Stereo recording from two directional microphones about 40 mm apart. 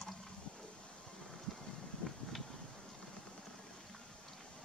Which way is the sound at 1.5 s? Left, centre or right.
Centre.